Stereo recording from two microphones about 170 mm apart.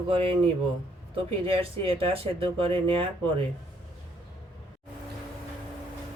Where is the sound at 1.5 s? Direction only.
35° right (ahead or behind).